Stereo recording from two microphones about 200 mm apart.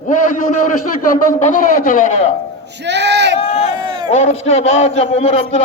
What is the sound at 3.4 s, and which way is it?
Speech, 30° left (ahead or behind).